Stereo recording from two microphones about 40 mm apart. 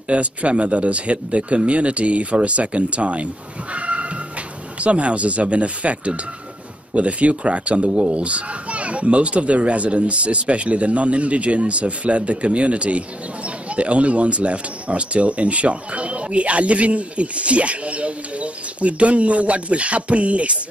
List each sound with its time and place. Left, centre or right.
0.1 s speech: right
3.7 s a sound: right
4.7 s speech: right